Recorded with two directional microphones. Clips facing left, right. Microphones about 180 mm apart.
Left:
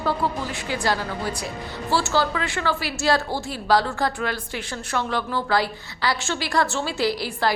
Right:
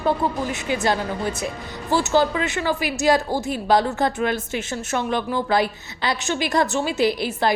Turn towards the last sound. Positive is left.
turn(degrees=-20)  # may be behind; listen again after turning